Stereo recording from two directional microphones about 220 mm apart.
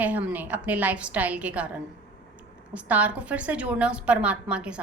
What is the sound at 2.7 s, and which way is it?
A woman's voice, 5° right (ahead or behind).